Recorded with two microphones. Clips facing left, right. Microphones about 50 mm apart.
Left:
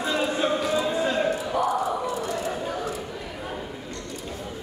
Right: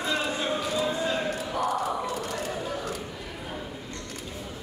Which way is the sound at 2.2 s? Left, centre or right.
Left.